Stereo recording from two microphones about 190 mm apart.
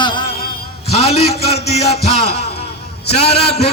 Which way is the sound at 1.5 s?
55° left (ahead or behind).